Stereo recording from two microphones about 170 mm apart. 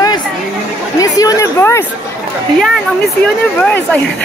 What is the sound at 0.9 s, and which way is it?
Speech, 20° left (ahead or behind).